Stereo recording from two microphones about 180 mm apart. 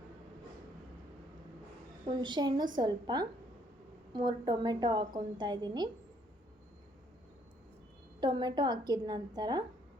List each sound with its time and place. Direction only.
2.0 s a woman's voice: 25° right (ahead or behind)
8.2 s a woman's voice: 25° right (ahead or behind)